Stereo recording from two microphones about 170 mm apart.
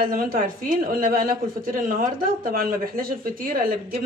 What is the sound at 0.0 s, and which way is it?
A woman's voice, 55° right (ahead or behind).